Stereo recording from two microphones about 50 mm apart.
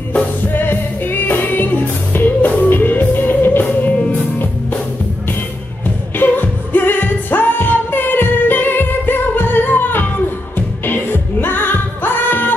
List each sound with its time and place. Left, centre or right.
0.6 s music: left
6.1 s music: left